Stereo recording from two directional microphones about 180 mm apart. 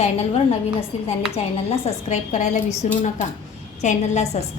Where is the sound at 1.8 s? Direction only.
40° left (ahead or behind).